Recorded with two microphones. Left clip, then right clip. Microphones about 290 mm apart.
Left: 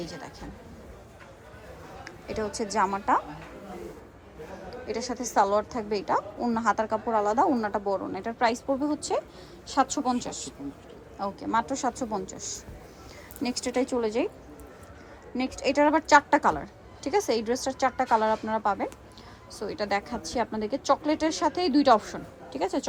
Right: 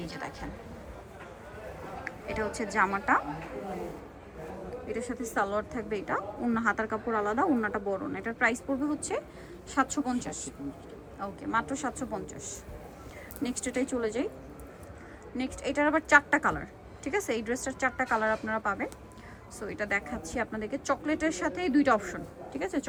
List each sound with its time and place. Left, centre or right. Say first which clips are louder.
2.5 s speech: left 2 dB; left
2.7 s a woman's voice: left 1 dB; centre
4.9 s a woman's voice: left 7 dB; centre
15.4 s a woman's voice: left 6 dB; centre